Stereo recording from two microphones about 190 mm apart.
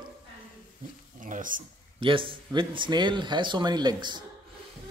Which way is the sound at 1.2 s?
45° right (ahead or behind).